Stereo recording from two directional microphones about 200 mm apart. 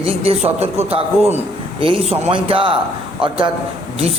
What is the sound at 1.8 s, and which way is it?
Speech, 25° right (ahead or behind).